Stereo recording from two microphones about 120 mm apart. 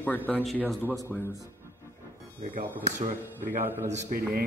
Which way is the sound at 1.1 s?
15° left (ahead or behind).